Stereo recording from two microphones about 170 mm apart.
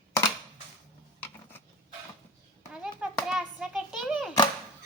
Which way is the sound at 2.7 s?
5° right (ahead or behind).